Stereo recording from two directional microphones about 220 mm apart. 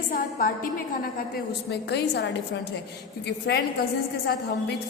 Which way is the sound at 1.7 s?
50° left (ahead or behind).